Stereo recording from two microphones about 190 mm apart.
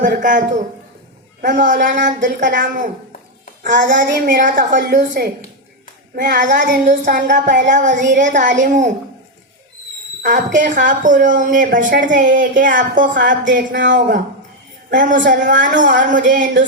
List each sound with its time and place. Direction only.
0.0 s a woman's voice: 45° right (ahead or behind)
10.2 s a woman's voice: 45° right (ahead or behind)
14.9 s a woman's voice: 45° right (ahead or behind)